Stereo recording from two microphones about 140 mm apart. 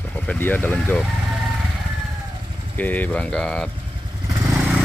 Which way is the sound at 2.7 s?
10° left (ahead or behind).